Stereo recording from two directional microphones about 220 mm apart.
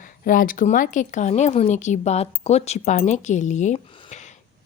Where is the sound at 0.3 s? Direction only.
40° left (ahead or behind).